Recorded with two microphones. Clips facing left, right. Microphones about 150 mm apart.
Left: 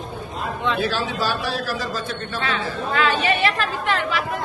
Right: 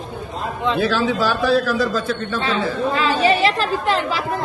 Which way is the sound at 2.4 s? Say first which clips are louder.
Right 4 dB; 30° right (ahead or behind).